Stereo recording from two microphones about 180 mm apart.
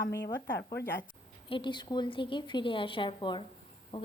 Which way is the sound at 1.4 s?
30° left (ahead or behind).